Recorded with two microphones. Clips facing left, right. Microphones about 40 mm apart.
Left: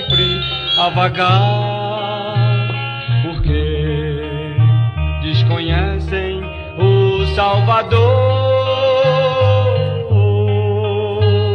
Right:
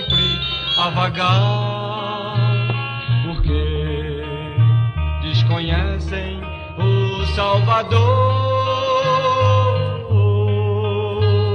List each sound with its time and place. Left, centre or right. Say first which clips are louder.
0.7 s music: left 5 dB; centre
3.4 s music: left 6 dB; centre
5.5 s music: left 4 dB; centre
10.1 s music: left 2 dB; centre
10.5 s music: left 3 dB; centre